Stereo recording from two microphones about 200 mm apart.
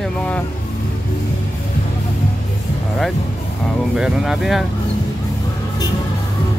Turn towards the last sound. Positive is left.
turn(degrees=0)  # may be behind; listen again after turning